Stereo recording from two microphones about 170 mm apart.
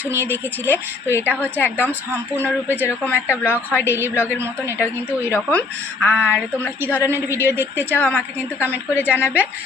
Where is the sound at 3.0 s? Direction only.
10° left (ahead or behind).